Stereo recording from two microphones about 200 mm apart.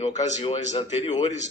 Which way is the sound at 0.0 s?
30° left (ahead or behind).